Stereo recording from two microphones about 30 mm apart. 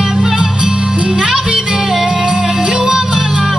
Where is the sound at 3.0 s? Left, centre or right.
Right.